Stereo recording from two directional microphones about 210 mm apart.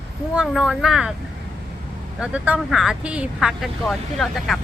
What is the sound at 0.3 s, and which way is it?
Speech, 5° right (ahead or behind).